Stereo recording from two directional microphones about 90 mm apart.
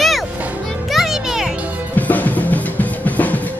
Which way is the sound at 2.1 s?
20° left (ahead or behind).